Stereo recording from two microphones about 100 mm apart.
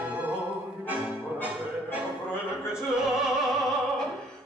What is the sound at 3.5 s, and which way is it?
Music, centre (ahead or behind).